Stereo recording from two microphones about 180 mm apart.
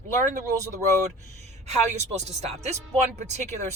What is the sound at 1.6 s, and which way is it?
Speech, 40° right (ahead or behind).